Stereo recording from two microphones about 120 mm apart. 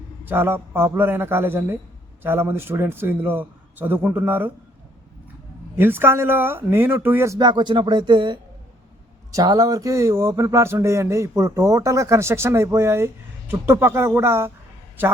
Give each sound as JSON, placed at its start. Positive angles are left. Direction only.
{"t": 0.3, "sound": "a man's voice", "side_deg": -20}
{"t": 5.7, "sound": "a man's voice", "side_deg": -20}
{"t": 7.3, "sound": "a man's voice", "side_deg": -40}